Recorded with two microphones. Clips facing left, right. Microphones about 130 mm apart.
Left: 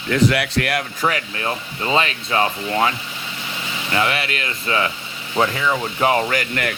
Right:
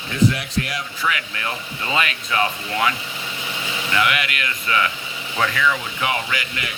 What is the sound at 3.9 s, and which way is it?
Speech, 30° left (ahead or behind).